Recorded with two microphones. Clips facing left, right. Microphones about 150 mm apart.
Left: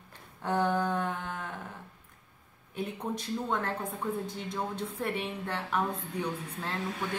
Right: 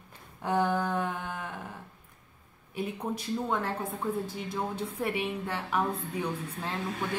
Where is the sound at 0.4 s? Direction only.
10° right (ahead or behind).